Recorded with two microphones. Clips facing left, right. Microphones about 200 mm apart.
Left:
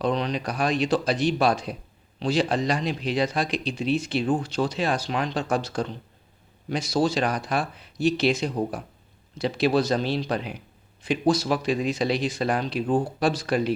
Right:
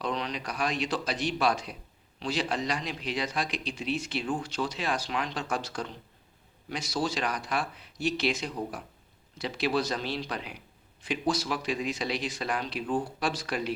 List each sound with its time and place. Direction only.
0.0 s speech: 30° left (ahead or behind)